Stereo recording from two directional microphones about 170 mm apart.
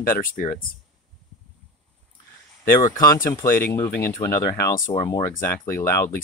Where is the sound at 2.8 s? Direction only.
20° left (ahead or behind).